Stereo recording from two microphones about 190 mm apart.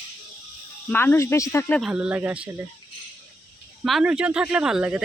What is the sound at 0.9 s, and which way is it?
Speech, 10° left (ahead or behind).